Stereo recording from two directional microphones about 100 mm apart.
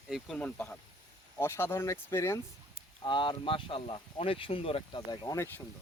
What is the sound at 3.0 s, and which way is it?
Speech, 50° left (ahead or behind).